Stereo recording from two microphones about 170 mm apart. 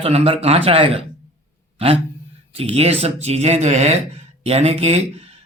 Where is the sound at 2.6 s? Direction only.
35° right (ahead or behind).